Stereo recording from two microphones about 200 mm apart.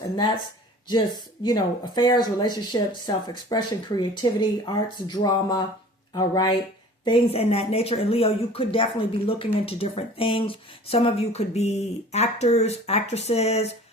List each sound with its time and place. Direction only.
1.5 s speech: 20° left (ahead or behind)